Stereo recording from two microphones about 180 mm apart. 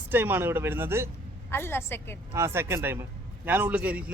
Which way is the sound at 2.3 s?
15° right (ahead or behind).